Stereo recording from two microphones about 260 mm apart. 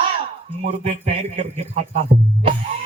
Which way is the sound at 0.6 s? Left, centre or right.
Right.